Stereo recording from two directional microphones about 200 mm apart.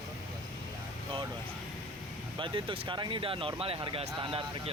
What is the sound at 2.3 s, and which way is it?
Speech, 25° right (ahead or behind).